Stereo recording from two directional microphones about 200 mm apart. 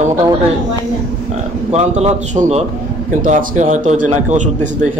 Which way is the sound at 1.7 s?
35° right (ahead or behind).